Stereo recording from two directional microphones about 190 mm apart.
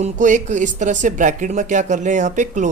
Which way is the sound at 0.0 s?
40° right (ahead or behind).